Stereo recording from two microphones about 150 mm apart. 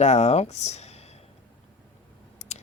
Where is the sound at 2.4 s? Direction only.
50° left (ahead or behind).